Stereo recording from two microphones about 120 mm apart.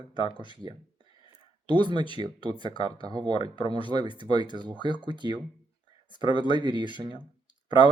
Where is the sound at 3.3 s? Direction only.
45° left (ahead or behind).